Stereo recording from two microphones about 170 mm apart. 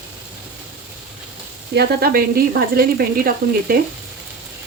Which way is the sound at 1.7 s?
70° right (ahead or behind).